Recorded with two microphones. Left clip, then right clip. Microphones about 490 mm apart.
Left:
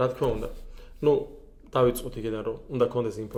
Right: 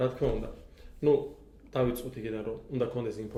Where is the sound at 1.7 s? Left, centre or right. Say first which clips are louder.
Left 7 dB; left.